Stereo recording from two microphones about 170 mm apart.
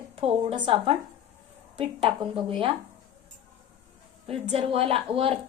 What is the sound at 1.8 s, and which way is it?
Speech, 30° right (ahead or behind).